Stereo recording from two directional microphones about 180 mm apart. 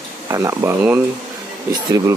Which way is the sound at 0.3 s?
15° right (ahead or behind).